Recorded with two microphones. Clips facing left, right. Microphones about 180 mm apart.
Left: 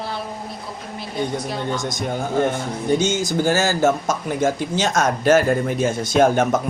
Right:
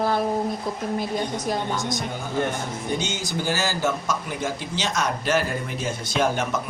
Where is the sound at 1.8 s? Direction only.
45° left (ahead or behind).